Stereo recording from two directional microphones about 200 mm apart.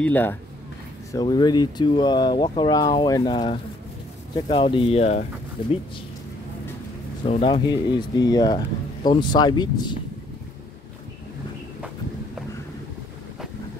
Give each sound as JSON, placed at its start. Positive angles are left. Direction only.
{"t": 0.0, "sound": "speech", "side_deg": 10}
{"t": 1.1, "sound": "speech", "side_deg": 20}
{"t": 7.4, "sound": "speech", "side_deg": 25}